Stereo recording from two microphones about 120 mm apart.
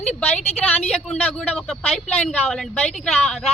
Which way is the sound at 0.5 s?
15° left (ahead or behind).